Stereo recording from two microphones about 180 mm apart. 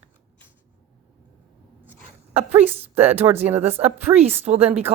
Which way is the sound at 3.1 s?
10° right (ahead or behind).